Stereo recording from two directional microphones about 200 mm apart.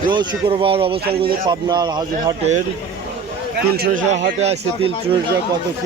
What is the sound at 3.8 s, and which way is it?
Speech, 40° right (ahead or behind).